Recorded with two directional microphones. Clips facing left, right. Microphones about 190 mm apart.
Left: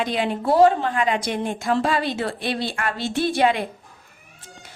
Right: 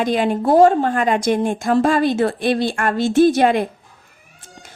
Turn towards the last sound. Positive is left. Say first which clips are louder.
# right 7 dB
turn(degrees=-45)  # may be behind; listen again after turning